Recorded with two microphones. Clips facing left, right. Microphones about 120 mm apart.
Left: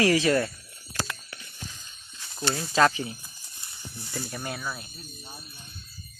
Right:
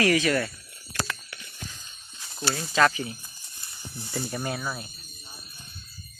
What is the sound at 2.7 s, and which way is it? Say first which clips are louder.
Speech: even; 25° left (ahead or behind).